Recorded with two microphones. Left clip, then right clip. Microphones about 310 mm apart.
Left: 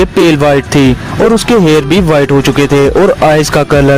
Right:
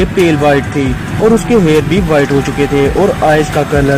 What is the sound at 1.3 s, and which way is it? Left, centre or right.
Speech, left.